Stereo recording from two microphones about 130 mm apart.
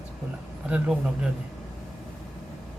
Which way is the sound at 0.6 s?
10° right (ahead or behind).